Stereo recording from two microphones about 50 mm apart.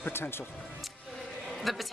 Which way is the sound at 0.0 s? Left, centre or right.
Left.